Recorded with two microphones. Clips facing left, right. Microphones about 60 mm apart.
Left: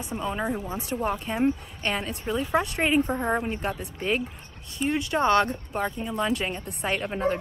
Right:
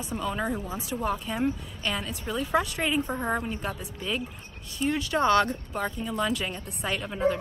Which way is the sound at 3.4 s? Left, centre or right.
Left.